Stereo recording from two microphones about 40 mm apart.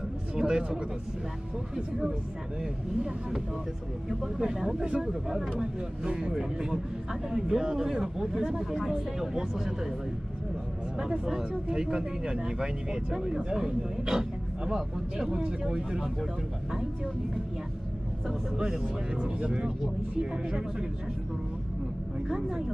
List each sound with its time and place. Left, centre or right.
0.4 s speech: centre
2.6 s speech: centre
4.4 s speech: centre
4.8 s speech: right
11.0 s speech: centre
19.4 s speech: right